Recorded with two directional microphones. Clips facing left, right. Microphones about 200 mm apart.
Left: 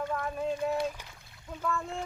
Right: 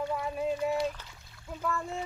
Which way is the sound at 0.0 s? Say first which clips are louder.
Right 1 dB; 10° right (ahead or behind).